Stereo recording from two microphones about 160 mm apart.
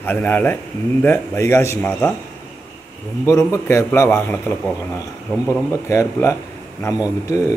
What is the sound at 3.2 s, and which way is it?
Speech, 20° left (ahead or behind).